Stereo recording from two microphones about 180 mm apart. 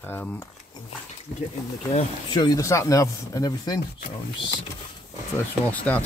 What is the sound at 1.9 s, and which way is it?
Speech, 35° left (ahead or behind).